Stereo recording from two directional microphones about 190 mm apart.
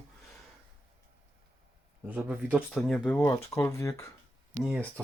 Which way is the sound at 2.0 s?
5° right (ahead or behind).